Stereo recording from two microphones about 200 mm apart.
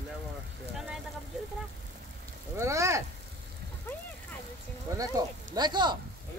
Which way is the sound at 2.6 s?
15° right (ahead or behind).